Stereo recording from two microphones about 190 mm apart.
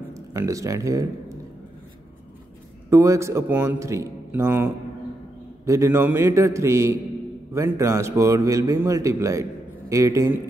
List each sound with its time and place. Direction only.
0.1 s speech: 15° right (ahead or behind)
2.9 s a man's voice: 15° right (ahead or behind)
5.7 s a man's voice: 15° right (ahead or behind)